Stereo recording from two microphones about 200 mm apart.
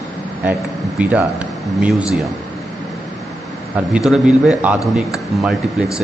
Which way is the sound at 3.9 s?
5° right (ahead or behind).